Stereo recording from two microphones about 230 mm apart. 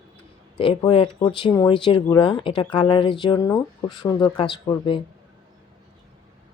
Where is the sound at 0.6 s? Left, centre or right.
Centre.